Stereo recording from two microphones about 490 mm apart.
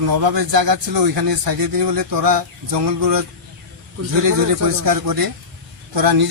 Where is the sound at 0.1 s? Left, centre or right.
Right.